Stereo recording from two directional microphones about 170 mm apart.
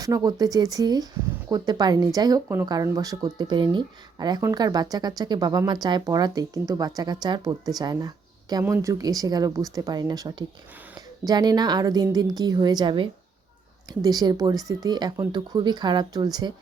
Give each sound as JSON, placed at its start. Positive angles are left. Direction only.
{"t": 0.0, "sound": "speech", "side_deg": -20}